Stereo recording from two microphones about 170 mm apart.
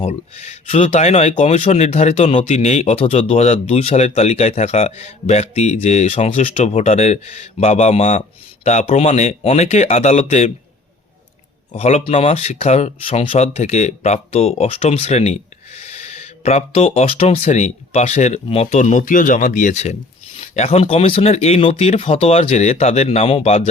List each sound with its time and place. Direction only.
0.0 s speech: 40° left (ahead or behind)
11.7 s speech: 40° left (ahead or behind)